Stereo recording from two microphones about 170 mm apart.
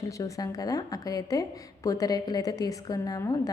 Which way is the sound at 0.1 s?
20° left (ahead or behind).